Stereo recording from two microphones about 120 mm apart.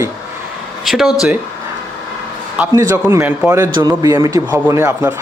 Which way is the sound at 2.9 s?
25° right (ahead or behind).